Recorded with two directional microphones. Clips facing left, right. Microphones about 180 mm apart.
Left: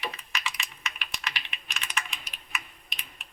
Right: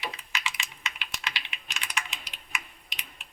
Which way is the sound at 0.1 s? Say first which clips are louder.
Even; 15° right (ahead or behind).